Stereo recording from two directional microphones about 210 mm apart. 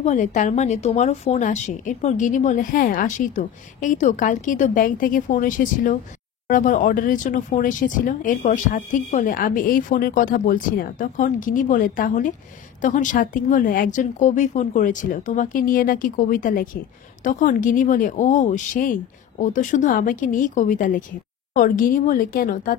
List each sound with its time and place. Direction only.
0.0 s speech: 35° left (ahead or behind)